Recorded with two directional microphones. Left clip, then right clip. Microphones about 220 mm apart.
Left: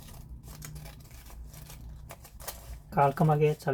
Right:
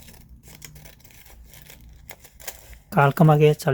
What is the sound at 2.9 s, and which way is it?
Speech, 50° right (ahead or behind).